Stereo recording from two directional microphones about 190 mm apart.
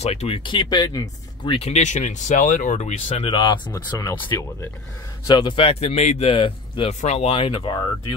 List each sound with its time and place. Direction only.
0.0 s a man's voice: 35° left (ahead or behind)